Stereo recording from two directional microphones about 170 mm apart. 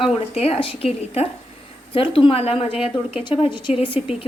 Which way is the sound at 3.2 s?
30° left (ahead or behind).